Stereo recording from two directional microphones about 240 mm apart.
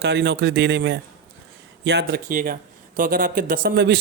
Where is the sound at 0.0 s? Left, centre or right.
Right.